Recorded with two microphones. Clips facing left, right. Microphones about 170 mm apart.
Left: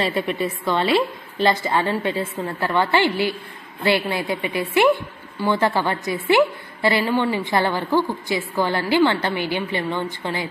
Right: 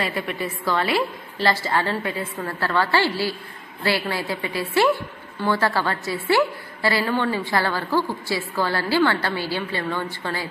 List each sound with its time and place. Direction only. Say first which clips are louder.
0.0 s a woman's voice: left 4 dB; 20° left (ahead or behind)